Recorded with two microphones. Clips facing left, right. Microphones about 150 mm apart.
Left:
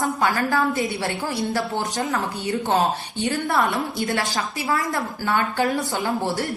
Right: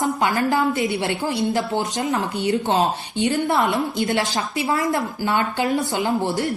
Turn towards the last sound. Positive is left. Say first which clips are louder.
# right 2 dB
turn(degrees=-20)  # may be behind; listen again after turning